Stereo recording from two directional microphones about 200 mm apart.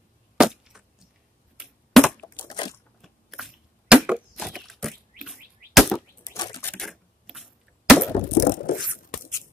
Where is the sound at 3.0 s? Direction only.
Centre (ahead or behind).